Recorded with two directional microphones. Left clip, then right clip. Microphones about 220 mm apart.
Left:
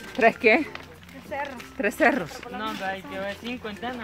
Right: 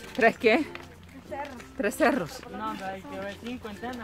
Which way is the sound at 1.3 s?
50° left (ahead or behind).